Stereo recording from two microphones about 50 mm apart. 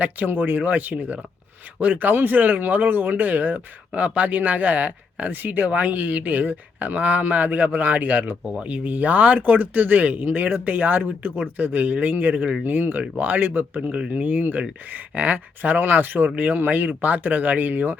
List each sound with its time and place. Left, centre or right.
0.3 s speech: right
0.5 s speech: right
12.3 s speech: right
12.6 s speech: right